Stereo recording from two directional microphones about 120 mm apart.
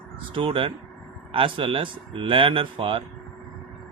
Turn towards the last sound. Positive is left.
turn(degrees=-50)  # may be behind; listen again after turning